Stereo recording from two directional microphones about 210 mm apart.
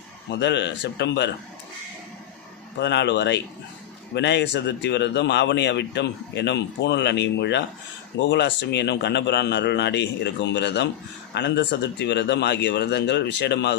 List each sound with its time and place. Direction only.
0.3 s speech: 55° left (ahead or behind)
2.7 s speech: 55° left (ahead or behind)